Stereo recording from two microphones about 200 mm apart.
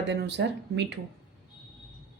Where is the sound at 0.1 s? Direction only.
60° right (ahead or behind).